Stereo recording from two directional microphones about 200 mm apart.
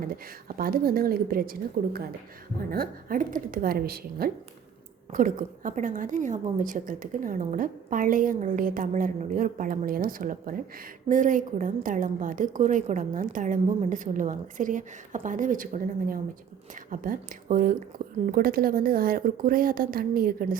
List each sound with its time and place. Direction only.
0.0 s a woman's voice: 45° right (ahead or behind)